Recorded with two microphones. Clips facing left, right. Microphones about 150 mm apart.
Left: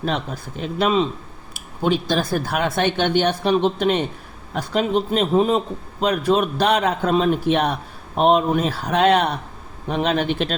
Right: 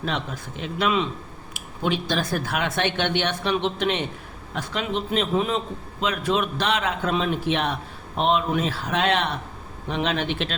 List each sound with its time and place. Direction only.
0.0 s a man's voice: 40° left (ahead or behind)